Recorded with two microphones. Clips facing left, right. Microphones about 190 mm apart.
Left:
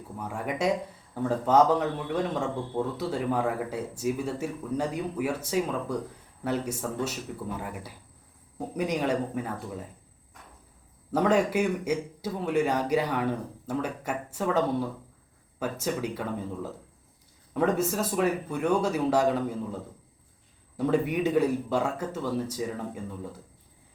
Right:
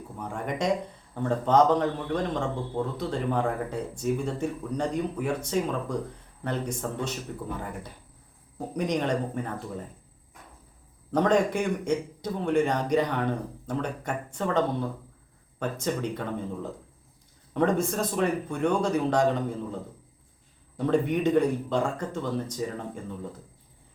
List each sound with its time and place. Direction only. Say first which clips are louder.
0.2 s speech: even; 5° left (ahead or behind)
11.1 s speech: right 1 dB; 5° left (ahead or behind)
17.5 s speech: right 1 dB; 5° left (ahead or behind)
20.7 s speech: right 1 dB; 5° left (ahead or behind)